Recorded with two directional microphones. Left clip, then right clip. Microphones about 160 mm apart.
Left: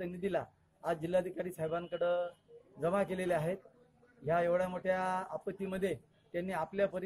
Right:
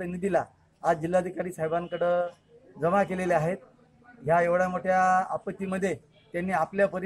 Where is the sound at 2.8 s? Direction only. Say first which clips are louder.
Right 8 dB; 5° left (ahead or behind).